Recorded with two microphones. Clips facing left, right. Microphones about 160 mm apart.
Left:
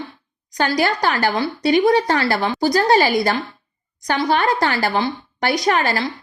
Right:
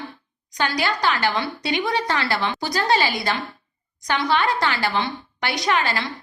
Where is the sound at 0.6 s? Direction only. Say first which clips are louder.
Left 4 dB; 40° left (ahead or behind).